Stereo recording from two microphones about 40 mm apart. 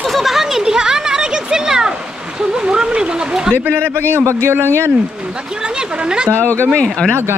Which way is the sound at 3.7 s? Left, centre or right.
Right.